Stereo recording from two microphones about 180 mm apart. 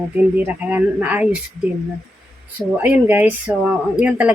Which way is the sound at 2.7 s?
10° right (ahead or behind).